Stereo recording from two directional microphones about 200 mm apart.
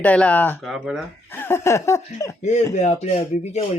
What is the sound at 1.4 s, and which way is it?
Speech, 10° left (ahead or behind).